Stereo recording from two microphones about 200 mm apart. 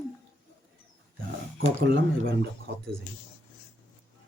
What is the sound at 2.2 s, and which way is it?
Speech, 55° right (ahead or behind).